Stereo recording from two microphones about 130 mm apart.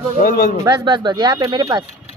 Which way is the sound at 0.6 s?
35° right (ahead or behind).